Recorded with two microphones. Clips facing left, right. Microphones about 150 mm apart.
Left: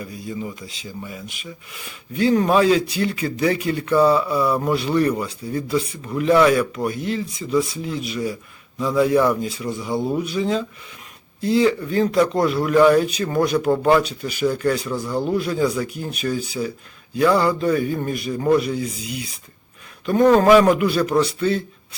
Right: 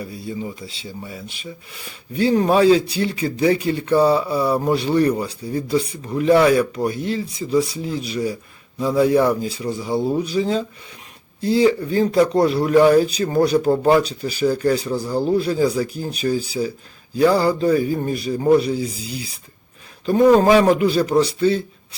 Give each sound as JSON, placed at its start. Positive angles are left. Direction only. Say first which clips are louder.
{"t": 0.0, "sound": "speech", "louder": "right 1 dB", "side_deg": -30}
{"t": 20.1, "sound": "speech", "louder": "right 2 dB", "side_deg": -10}
{"t": 20.4, "sound": "speech", "louder": "even", "side_deg": -30}